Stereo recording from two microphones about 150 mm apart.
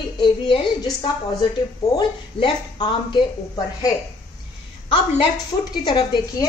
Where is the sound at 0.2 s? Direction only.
35° left (ahead or behind).